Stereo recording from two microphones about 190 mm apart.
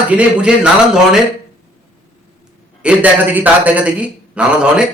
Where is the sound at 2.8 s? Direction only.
10° right (ahead or behind).